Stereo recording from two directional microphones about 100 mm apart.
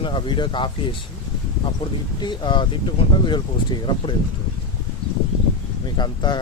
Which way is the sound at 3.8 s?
55° left (ahead or behind).